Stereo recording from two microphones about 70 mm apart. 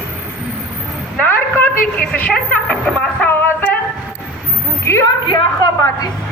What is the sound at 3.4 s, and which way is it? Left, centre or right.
Music, left.